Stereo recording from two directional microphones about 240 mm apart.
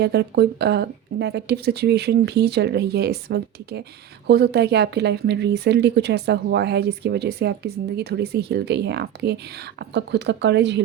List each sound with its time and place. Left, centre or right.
0.0 s speech: right